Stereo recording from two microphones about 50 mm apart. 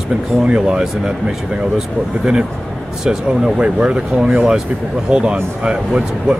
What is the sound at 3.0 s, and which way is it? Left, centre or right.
Speech, centre.